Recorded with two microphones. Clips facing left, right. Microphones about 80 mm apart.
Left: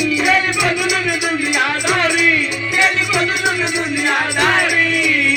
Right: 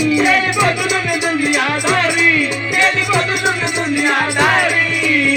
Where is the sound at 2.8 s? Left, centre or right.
Centre.